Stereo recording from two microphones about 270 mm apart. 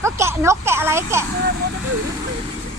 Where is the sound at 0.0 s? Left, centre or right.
Centre.